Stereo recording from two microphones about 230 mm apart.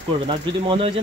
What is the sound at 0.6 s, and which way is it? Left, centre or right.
Speech, right.